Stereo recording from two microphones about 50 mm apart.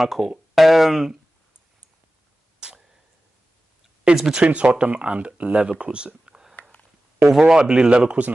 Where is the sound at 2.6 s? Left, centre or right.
Centre.